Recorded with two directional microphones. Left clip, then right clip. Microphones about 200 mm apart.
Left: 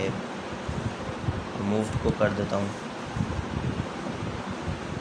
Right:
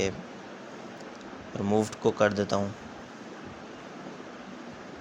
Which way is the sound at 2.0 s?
35° right (ahead or behind).